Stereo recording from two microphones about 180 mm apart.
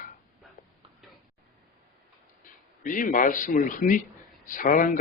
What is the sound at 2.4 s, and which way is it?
A man's voice, 50° left (ahead or behind).